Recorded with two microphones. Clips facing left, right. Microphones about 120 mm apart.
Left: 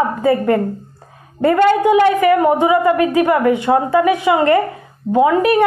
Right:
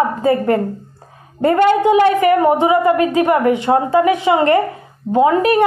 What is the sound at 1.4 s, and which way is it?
A woman's voice, 25° right (ahead or behind).